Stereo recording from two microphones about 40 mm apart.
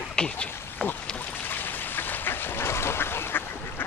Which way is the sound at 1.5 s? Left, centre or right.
Left.